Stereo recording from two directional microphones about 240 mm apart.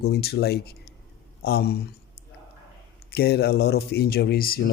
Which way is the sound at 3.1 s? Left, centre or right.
Left.